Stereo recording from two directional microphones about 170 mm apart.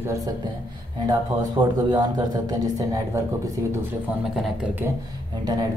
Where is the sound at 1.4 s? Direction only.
20° right (ahead or behind).